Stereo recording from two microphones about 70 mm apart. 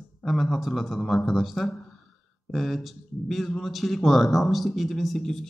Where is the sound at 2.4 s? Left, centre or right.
Centre.